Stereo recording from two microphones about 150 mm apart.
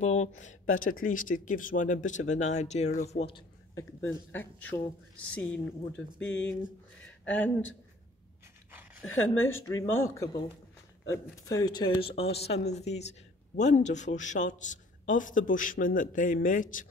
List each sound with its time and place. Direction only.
0.0 s speech: 50° left (ahead or behind)
3.7 s speech: 15° left (ahead or behind)
9.8 s speech: 20° left (ahead or behind)
11.4 s speech: 25° left (ahead or behind); by 16.8 s 60° left (ahead or behind)